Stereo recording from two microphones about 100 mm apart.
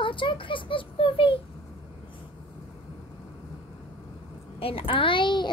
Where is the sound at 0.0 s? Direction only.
55° left (ahead or behind).